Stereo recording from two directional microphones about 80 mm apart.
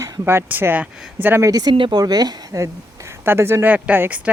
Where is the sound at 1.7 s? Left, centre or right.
Right.